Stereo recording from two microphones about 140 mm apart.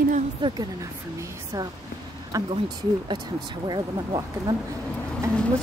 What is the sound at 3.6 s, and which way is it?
Speech, 30° right (ahead or behind).